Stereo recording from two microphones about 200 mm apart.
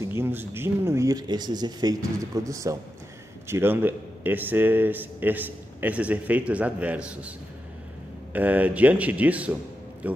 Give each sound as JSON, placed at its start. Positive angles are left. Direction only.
{"t": 0.0, "sound": "a man's voice", "side_deg": -10}
{"t": 8.3, "sound": "a man's voice", "side_deg": -10}